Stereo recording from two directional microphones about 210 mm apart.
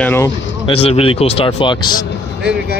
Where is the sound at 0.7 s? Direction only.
30° left (ahead or behind).